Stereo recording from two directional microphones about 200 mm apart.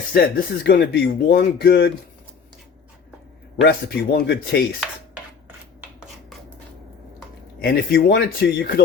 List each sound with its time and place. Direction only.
0.1 s speech: 50° left (ahead or behind)
3.6 s speech: 55° left (ahead or behind)
7.6 s speech: 50° left (ahead or behind)